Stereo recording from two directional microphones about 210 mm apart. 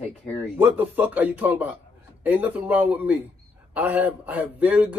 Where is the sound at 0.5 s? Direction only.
10° right (ahead or behind).